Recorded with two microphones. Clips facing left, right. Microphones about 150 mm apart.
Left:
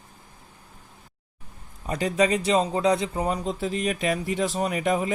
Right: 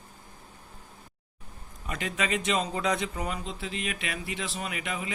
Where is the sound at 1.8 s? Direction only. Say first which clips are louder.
Left 9 dB; 35° left (ahead or behind).